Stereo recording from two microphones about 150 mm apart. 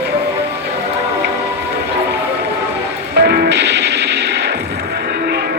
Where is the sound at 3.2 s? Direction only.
90° right.